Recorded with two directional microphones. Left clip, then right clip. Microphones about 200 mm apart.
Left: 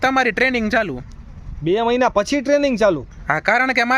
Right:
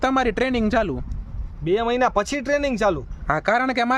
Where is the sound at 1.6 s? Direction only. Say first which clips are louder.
Left 3 dB; 50° left (ahead or behind).